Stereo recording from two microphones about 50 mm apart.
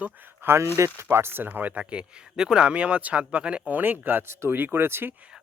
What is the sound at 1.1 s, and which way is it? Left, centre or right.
Speech, right.